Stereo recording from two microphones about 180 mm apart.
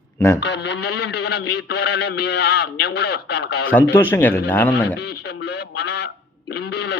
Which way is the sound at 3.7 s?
10° left (ahead or behind).